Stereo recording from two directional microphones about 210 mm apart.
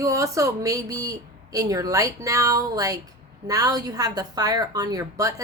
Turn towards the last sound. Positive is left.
turn(degrees=-15)  # may be behind; listen again after turning